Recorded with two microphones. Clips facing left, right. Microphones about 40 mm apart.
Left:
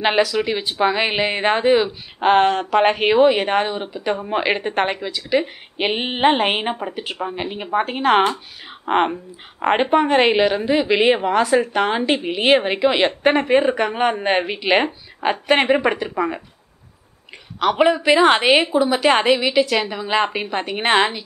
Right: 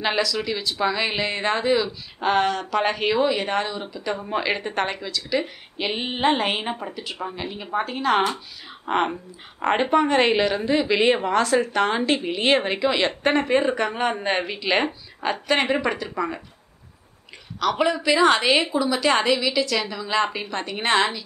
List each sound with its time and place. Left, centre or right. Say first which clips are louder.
0.0 s a woman's voice: left 6 dB; left
5.8 s a woman's voice: left 5 dB; left
8.8 s a woman's voice: left 4 dB; left
17.6 s a woman's voice: left 5 dB; left